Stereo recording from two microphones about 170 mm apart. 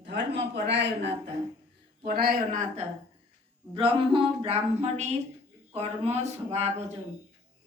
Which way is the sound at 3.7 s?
30° right (ahead or behind).